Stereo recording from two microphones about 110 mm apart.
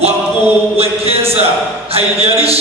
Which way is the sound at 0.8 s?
65° right (ahead or behind).